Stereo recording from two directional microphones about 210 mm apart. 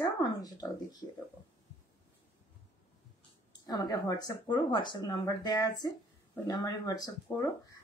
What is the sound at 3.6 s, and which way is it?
Speech, 15° left (ahead or behind).